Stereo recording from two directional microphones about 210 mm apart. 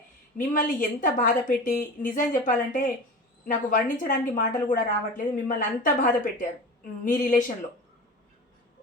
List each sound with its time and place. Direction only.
0.3 s a woman's voice: 40° left (ahead or behind)